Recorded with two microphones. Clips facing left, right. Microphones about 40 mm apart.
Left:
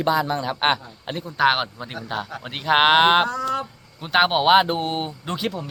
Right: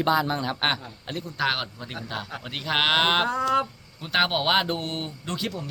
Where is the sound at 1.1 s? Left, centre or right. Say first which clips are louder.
Left 7 dB; left.